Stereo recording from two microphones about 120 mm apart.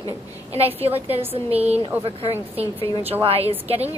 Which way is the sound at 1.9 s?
15° right (ahead or behind).